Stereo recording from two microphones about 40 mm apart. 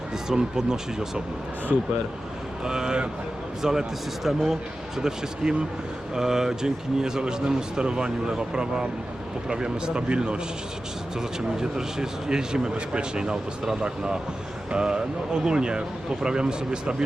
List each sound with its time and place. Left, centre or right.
0.3 s a man's voice: centre
2.6 s a man's voice: centre